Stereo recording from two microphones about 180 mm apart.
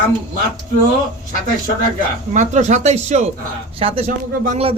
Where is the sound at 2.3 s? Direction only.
40° right (ahead or behind).